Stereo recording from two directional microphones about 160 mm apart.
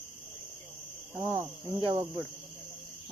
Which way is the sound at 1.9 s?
25° right (ahead or behind).